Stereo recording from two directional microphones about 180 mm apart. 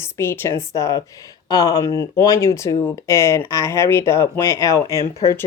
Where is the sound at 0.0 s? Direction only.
15° left (ahead or behind).